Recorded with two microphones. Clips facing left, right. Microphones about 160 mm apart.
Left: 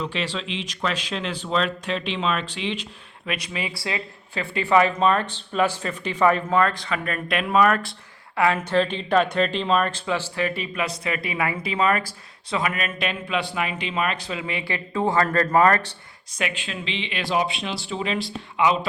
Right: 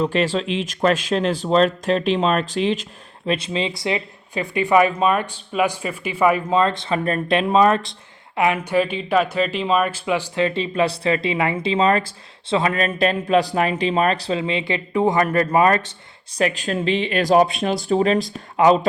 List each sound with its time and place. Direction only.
0.0 s speech: 45° right (ahead or behind)
3.2 s speech: 30° right (ahead or behind)
8.4 s speech: 15° right (ahead or behind)
16.4 s speech: 40° right (ahead or behind)